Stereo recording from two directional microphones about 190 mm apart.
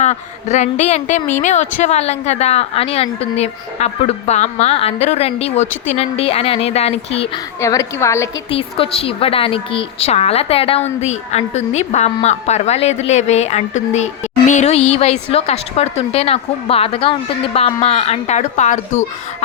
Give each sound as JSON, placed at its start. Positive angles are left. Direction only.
{"t": 0.0, "sound": "speech", "side_deg": 40}
{"t": 7.6, "sound": "a woman's voice", "side_deg": 15}
{"t": 8.4, "sound": "speech", "side_deg": 30}